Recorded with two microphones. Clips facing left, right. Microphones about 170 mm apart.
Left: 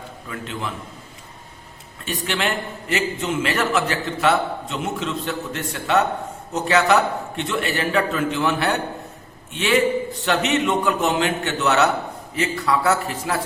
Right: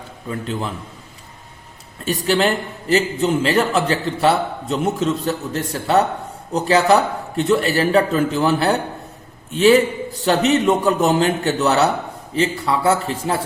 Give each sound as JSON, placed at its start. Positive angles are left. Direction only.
{"t": 0.3, "sound": "a man's voice", "side_deg": -35}
{"t": 2.0, "sound": "a man's voice", "side_deg": -35}